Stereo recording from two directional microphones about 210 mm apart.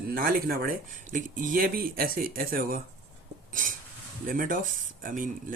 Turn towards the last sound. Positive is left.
turn(degrees=-40)  # may be behind; listen again after turning